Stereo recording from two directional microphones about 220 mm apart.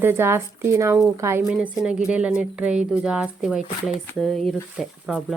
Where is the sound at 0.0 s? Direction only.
10° right (ahead or behind).